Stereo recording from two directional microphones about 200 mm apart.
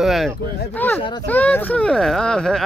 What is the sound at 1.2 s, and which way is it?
Speech, 10° left (ahead or behind).